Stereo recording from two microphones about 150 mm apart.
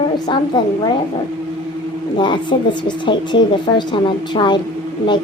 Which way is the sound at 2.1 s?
30° left (ahead or behind).